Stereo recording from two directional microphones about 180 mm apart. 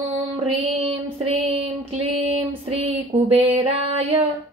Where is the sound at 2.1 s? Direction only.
35° right (ahead or behind).